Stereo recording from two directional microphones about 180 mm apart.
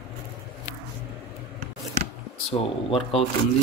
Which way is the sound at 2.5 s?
30° left (ahead or behind).